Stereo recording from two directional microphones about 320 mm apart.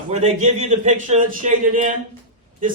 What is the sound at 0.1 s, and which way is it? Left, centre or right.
A man's voice, right.